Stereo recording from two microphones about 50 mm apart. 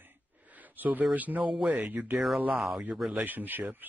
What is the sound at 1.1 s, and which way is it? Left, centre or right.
Speech, right.